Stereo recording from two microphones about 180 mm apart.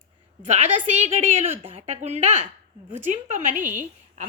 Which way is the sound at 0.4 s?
35° right (ahead or behind).